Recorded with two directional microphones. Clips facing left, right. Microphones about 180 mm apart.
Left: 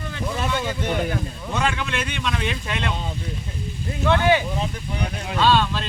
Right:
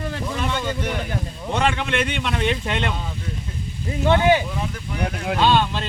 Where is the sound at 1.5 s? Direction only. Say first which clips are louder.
Right 3 dB; 60° right (ahead or behind).